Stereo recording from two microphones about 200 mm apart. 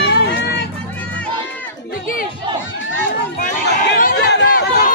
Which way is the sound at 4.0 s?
50° left (ahead or behind).